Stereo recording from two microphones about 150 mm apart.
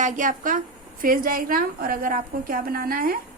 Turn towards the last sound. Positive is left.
turn(degrees=-75)  # may be behind; listen again after turning